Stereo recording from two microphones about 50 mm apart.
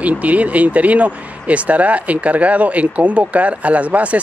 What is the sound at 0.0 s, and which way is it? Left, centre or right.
Speech, right.